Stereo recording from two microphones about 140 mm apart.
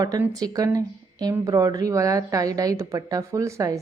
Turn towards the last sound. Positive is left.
turn(degrees=-20)  # may be behind; listen again after turning